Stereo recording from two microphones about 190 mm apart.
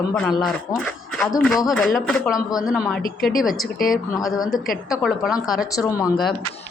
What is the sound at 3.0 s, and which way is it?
Speech, 50° left (ahead or behind).